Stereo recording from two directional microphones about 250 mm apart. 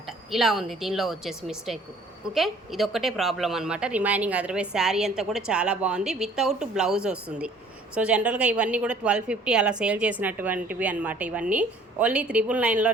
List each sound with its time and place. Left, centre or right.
0.3 s a woman's voice: centre